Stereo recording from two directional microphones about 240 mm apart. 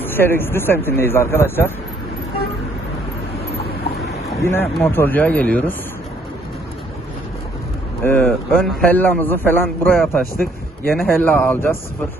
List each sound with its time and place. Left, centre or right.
0.0 s a man's voice: centre
4.4 s a man's voice: centre
8.0 s a man's voice: centre